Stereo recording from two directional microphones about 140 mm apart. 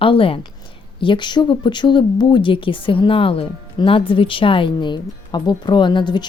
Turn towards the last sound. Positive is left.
turn(degrees=30)  # may be behind; listen again after turning